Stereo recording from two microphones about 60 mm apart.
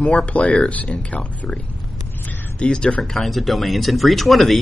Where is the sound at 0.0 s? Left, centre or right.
Centre.